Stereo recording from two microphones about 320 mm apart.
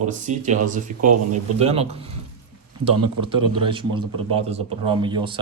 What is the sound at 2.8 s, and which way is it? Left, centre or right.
Speech, right.